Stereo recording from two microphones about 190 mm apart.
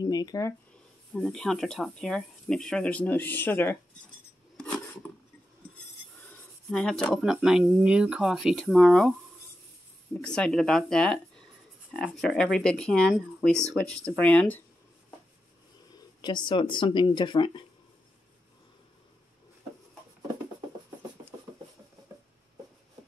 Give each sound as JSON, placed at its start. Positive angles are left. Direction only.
{"t": 0.0, "sound": "speech", "side_deg": 20}
{"t": 1.1, "sound": "speech", "side_deg": 5}
{"t": 4.6, "sound": "filing", "side_deg": 5}
{"t": 6.7, "sound": "speech", "side_deg": 5}
{"t": 10.1, "sound": "speech", "side_deg": 5}
{"t": 15.9, "sound": "speech", "side_deg": 20}